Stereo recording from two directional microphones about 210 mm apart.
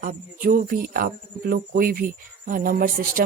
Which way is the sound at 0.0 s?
40° right (ahead or behind).